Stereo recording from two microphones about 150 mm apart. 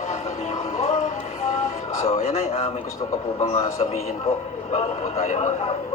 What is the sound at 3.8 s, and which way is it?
A man's voice, 40° left (ahead or behind).